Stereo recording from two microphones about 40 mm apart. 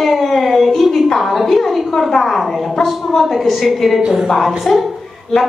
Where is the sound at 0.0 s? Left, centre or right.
Centre.